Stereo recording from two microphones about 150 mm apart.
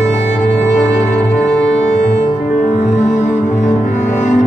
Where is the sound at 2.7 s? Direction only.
50° left (ahead or behind).